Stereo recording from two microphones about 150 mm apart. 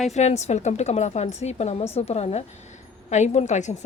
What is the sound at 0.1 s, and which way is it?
Speech, 50° left (ahead or behind).